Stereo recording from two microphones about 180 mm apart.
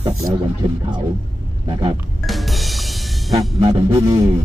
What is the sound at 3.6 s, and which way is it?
Speech, 20° right (ahead or behind).